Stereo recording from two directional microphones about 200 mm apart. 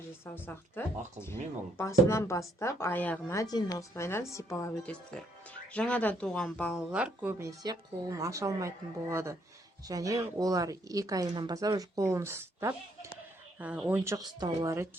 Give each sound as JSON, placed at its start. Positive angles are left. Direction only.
{"t": 0.3, "sound": "a woman's voice", "side_deg": 10}
{"t": 6.9, "sound": "speech", "side_deg": -5}